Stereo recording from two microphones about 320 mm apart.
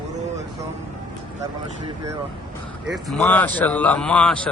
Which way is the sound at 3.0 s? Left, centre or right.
Centre.